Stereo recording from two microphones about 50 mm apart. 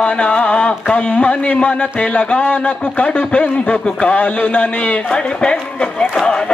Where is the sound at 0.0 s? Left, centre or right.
Left.